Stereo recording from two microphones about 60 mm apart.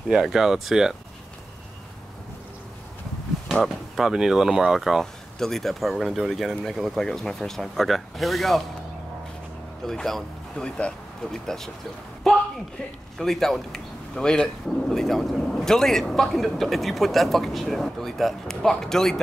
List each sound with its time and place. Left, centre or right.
0.1 s speech: centre
3.6 s speech: centre
9.8 s speech: centre
11.3 s speech: centre
12.2 s a sound: centre
13.2 s speech: centre